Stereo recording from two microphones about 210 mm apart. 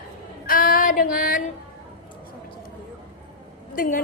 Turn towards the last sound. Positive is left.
turn(degrees=40)  # may be behind; listen again after turning